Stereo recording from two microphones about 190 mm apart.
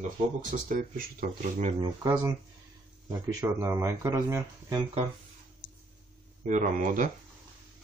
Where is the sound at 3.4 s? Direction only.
15° right (ahead or behind).